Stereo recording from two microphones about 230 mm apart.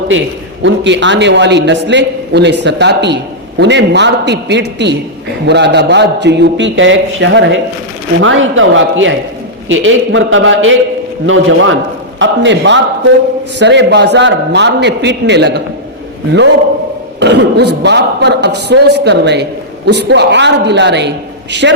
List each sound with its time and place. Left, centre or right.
0.6 s a man's voice: right
17.2 s a man's voice: right